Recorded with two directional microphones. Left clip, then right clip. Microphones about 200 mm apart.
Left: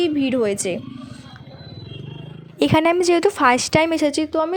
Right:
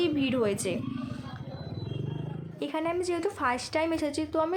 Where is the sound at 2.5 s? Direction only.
50° left (ahead or behind).